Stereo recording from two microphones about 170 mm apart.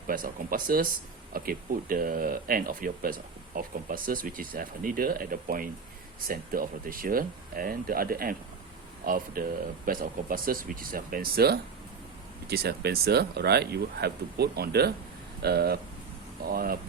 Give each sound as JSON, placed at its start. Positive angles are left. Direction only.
{"t": 0.1, "sound": "speech", "side_deg": -55}